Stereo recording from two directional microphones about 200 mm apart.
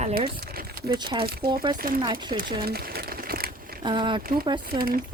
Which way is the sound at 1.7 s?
45° right (ahead or behind).